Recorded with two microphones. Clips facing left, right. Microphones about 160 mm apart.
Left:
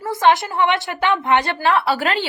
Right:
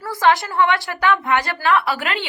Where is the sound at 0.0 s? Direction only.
20° left (ahead or behind).